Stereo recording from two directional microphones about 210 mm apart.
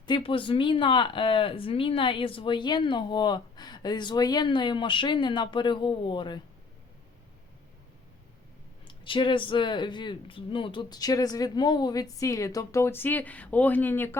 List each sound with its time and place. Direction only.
0.0 s speech: 25° left (ahead or behind)
8.9 s speech: 25° left (ahead or behind)